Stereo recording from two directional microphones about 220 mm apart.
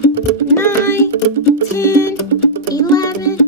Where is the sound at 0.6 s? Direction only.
10° left (ahead or behind).